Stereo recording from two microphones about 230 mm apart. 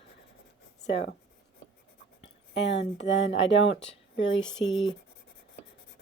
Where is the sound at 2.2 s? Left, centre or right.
Left.